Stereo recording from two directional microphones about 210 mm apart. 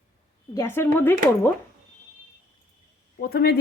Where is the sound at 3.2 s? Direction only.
45° left (ahead or behind).